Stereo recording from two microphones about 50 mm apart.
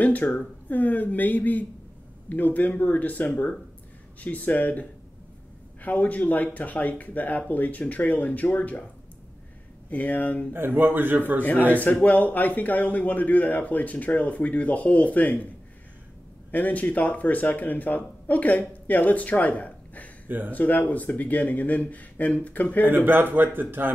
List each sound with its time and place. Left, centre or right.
0.0 s a man's voice: left
9.8 s a man's voice: left
10.5 s a man's voice: right
11.7 s a man's voice: left
16.5 s a man's voice: left
20.2 s speech: right
20.5 s a man's voice: left
22.8 s a man's voice: right